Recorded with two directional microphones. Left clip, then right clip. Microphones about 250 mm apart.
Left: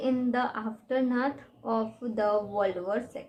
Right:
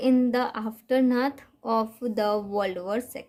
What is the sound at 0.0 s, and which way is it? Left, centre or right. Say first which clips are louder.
A woman's voice: right 5 dB; right.